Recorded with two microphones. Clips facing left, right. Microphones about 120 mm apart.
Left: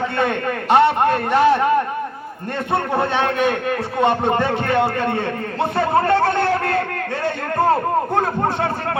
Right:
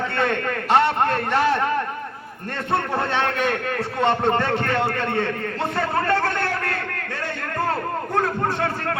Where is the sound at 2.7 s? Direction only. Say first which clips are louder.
Left 3 dB; 15° left (ahead or behind).